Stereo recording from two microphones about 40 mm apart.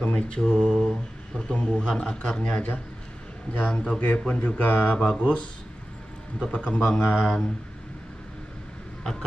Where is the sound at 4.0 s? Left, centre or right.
Left.